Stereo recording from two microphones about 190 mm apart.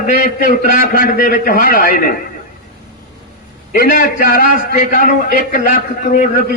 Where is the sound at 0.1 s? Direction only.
45° left (ahead or behind).